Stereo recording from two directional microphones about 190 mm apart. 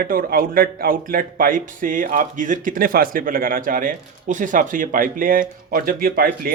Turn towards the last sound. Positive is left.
turn(degrees=-50)  # may be behind; listen again after turning